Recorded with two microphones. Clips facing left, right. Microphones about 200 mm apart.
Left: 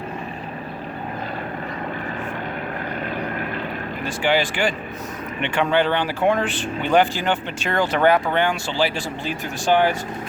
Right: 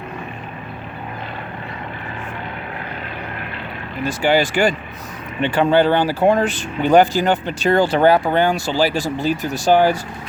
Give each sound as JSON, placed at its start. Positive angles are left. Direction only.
{"t": 4.0, "sound": "speech", "side_deg": -40}